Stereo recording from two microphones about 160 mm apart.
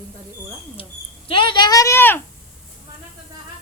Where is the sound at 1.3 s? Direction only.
30° left (ahead or behind); by 2.2 s 15° left (ahead or behind).